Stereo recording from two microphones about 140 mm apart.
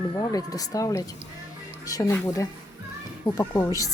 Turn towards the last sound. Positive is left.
turn(degrees=25)  # may be behind; listen again after turning